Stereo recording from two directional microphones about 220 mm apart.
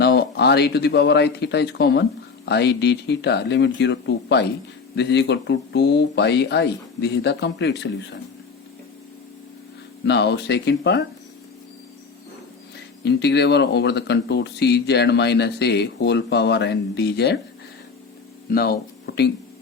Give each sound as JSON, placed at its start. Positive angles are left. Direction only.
{"t": 0.0, "sound": "speech", "side_deg": 45}
{"t": 10.1, "sound": "speech", "side_deg": 50}
{"t": 13.1, "sound": "speech", "side_deg": 50}
{"t": 18.5, "sound": "speech", "side_deg": 45}